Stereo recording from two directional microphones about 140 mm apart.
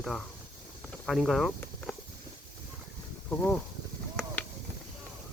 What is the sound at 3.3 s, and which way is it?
Speech, 10° left (ahead or behind).